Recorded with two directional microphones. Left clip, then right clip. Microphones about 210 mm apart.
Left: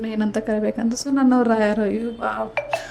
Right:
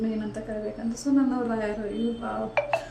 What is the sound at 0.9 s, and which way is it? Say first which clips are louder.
Speech: left 3 dB; 45° left (ahead or behind).